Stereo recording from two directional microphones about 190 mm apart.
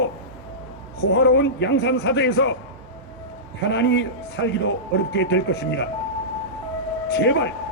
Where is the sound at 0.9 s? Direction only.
60° left (ahead or behind).